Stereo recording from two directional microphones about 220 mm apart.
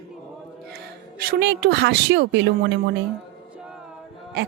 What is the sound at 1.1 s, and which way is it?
A woman's voice, 45° right (ahead or behind).